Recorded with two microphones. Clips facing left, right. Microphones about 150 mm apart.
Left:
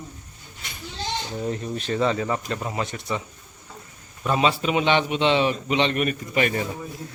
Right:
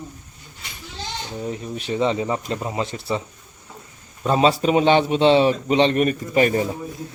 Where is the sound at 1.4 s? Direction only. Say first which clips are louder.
Right 1 dB; 5° right (ahead or behind); by 6.6 s 35° right (ahead or behind).